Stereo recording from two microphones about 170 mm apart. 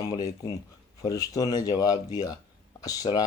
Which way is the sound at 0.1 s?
30° left (ahead or behind).